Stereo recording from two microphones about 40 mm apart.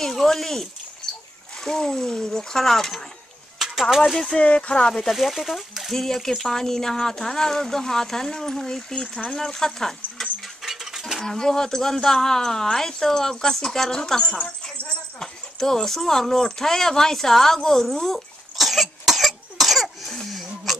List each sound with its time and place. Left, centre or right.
0.0 s speech: centre
3.5 s a sound: centre
4.2 s speech: left
4.8 s speech: centre
5.1 s speech: centre
10.4 s mechanisms: centre
11.2 s speech: centre
18.6 s cough: centre
20.1 s a sound: centre